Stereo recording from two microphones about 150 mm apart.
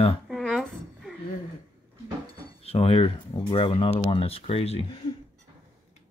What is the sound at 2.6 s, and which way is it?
Speech, 40° left (ahead or behind).